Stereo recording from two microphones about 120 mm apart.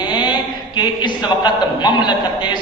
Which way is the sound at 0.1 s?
40° left (ahead or behind).